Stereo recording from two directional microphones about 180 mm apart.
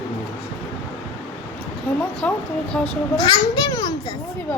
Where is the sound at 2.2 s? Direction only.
5° left (ahead or behind).